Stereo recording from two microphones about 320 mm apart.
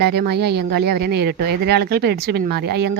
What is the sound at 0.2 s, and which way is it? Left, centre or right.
Speech, right.